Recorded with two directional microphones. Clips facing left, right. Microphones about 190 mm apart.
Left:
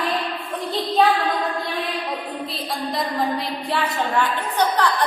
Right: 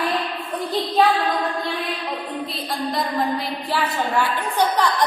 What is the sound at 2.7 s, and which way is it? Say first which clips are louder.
A woman's voice: right 2 dB; centre (ahead or behind).